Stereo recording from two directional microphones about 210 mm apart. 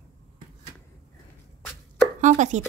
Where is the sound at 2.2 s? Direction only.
35° right (ahead or behind).